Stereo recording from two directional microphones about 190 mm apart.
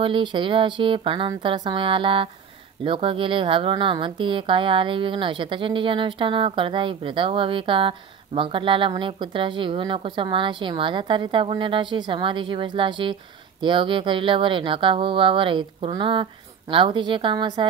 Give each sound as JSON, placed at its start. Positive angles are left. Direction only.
{"t": 0.0, "sound": "a woman's voice", "side_deg": -25}